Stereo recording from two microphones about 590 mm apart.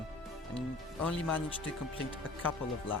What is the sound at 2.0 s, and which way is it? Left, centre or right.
Speech, left.